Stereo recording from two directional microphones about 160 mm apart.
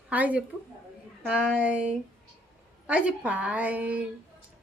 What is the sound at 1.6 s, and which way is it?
Speech, 5° right (ahead or behind).